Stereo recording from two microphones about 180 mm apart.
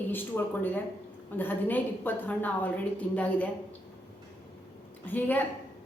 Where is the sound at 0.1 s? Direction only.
10° left (ahead or behind).